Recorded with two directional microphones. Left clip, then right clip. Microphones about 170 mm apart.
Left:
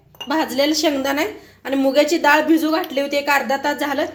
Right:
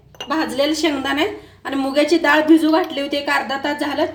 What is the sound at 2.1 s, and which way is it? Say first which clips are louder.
A woman's voice: right 1 dB; 25° left (ahead or behind).